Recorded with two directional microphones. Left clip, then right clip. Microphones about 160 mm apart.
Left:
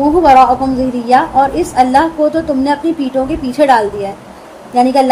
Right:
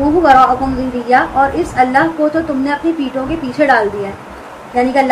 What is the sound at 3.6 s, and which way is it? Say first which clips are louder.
Speech: left 2 dB; 40° left (ahead or behind).